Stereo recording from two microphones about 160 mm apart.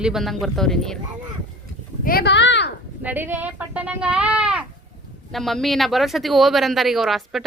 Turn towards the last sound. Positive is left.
turn(degrees=0)  # may be behind; listen again after turning